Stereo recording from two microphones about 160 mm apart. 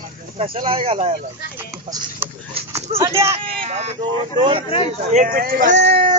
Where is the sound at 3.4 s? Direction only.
40° right (ahead or behind).